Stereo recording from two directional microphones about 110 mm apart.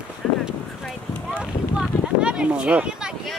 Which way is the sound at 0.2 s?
Centre (ahead or behind).